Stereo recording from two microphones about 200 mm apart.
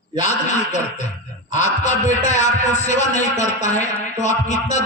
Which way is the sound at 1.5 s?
35° left (ahead or behind).